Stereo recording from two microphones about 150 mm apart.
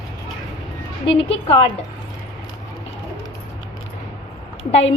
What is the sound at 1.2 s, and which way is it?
Speech, 40° left (ahead or behind).